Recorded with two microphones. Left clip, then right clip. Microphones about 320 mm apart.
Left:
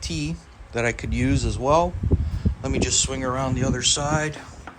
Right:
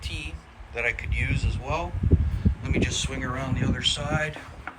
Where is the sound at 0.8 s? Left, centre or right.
Centre.